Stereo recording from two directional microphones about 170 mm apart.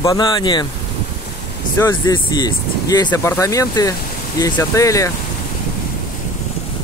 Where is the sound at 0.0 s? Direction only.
20° left (ahead or behind).